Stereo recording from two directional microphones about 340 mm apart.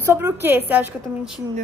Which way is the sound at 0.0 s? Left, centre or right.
Centre.